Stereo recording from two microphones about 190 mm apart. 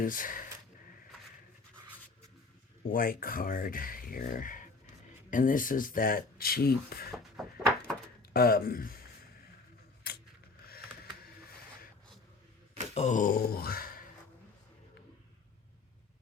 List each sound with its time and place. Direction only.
0.0 s speech: 45° left (ahead or behind)
2.9 s speech: 50° left (ahead or behind)
7.1 s a sound: centre (ahead or behind)
8.3 s speech: 55° left (ahead or behind)
12.9 s speech: 35° left (ahead or behind)